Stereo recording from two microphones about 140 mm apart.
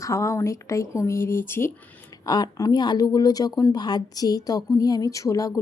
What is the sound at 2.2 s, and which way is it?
Speech, 30° left (ahead or behind).